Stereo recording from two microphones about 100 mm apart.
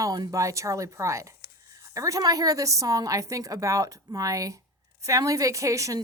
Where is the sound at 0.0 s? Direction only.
35° right (ahead or behind).